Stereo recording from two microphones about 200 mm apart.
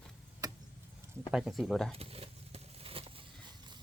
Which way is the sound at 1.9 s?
30° right (ahead or behind).